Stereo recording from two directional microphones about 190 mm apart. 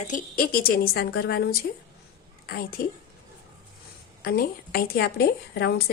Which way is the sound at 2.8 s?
50° left (ahead or behind).